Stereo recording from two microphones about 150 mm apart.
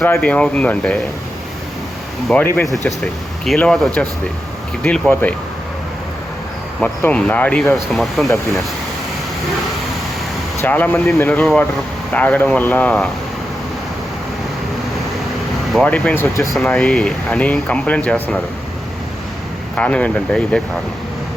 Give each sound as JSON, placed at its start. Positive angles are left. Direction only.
{"t": 0.0, "sound": "speech", "side_deg": 10}
{"t": 2.8, "sound": "speech", "side_deg": 5}
{"t": 7.0, "sound": "speech", "side_deg": 10}
{"t": 10.6, "sound": "speech", "side_deg": 15}
{"t": 15.7, "sound": "speech", "side_deg": 10}
{"t": 16.6, "sound": "speech", "side_deg": 5}
{"t": 19.7, "sound": "speech", "side_deg": 10}